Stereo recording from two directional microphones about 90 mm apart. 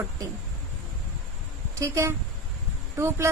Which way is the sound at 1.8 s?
35° right (ahead or behind).